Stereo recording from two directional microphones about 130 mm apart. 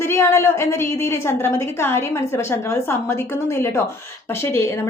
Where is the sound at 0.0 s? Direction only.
20° left (ahead or behind).